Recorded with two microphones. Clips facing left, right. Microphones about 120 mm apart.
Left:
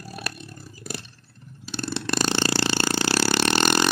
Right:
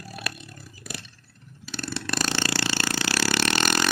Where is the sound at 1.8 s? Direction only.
25° left (ahead or behind).